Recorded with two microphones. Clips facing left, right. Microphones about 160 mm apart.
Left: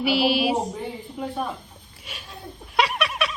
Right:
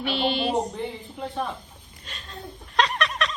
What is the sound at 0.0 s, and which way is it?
Speech, 10° left (ahead or behind).